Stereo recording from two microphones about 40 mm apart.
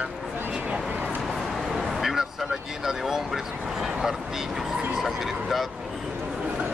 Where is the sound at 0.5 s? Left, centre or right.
Right.